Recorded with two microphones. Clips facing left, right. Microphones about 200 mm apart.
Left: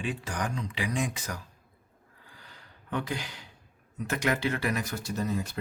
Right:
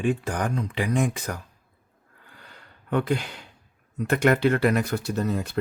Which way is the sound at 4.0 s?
60° right (ahead or behind).